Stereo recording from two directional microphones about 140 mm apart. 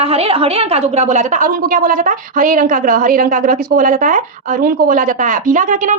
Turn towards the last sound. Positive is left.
turn(degrees=-65)  # may be behind; listen again after turning